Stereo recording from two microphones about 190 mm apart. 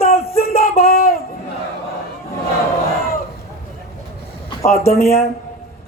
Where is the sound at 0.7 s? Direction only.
50° left (ahead or behind).